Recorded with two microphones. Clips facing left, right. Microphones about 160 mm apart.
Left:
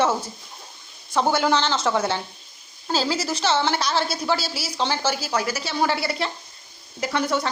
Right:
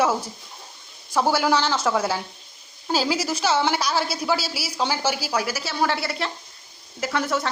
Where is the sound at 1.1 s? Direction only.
5° right (ahead or behind).